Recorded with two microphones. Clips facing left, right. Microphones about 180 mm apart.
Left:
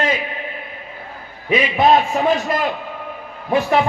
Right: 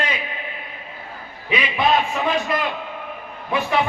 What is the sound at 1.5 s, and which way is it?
A man's voice, 45° left (ahead or behind).